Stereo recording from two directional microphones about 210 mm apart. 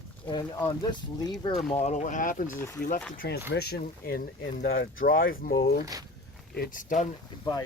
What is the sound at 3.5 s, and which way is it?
Speech, 50° left (ahead or behind).